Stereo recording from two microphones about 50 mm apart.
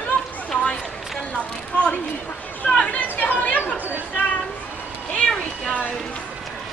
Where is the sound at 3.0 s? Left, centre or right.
Left.